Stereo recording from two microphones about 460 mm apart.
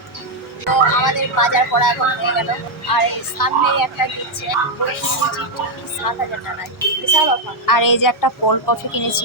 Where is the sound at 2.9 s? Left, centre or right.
Left.